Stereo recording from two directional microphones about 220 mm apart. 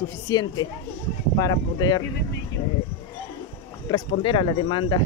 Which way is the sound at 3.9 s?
25° left (ahead or behind).